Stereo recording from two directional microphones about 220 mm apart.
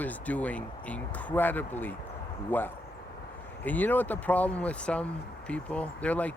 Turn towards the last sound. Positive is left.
turn(degrees=5)  # may be behind; listen again after turning